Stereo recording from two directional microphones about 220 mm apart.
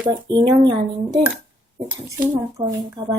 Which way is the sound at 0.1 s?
20° right (ahead or behind).